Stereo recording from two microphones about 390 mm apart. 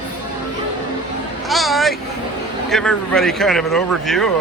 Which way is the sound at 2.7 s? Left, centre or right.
Centre.